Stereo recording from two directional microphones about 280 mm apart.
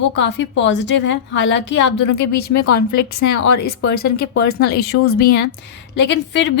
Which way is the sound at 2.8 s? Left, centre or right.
Left.